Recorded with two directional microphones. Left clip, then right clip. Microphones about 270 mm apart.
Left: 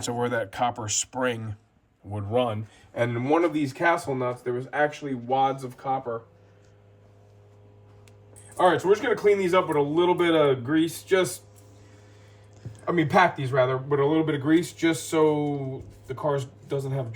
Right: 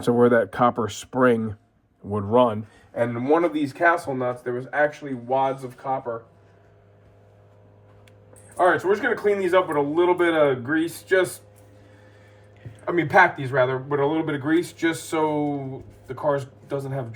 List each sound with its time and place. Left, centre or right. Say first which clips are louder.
0.0 s speech: right 9 dB; right
2.9 s speech: right 3 dB; centre
8.4 s speech: right 1 dB; centre
12.8 s speech: right 3 dB; centre